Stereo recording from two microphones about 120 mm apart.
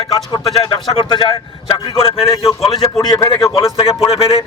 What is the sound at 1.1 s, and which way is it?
Speech, 40° left (ahead or behind).